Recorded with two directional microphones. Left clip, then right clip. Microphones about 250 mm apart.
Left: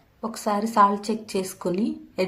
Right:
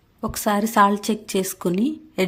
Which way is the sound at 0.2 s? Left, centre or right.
Right.